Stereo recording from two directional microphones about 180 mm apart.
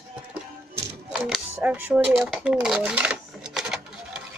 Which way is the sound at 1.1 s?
Centre (ahead or behind).